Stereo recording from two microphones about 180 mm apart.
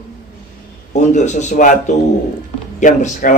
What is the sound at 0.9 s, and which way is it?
A man's voice, 40° left (ahead or behind).